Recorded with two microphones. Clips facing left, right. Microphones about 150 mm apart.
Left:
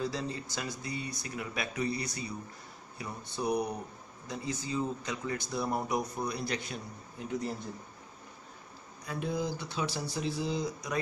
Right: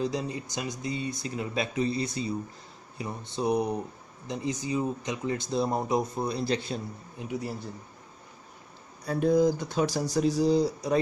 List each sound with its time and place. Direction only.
0.0 s speech: 20° right (ahead or behind)
7.2 s speech: 10° right (ahead or behind)
9.0 s speech: 40° right (ahead or behind)